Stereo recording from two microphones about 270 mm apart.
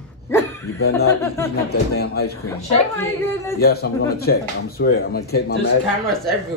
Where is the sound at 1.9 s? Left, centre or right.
Left.